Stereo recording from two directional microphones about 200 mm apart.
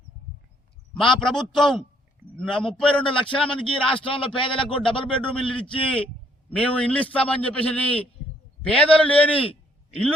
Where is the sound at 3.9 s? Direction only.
25° left (ahead or behind).